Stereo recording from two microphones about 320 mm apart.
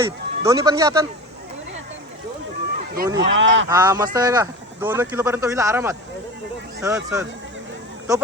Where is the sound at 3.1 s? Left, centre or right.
Right.